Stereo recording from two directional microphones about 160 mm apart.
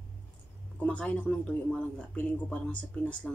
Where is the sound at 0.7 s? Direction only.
10° left (ahead or behind).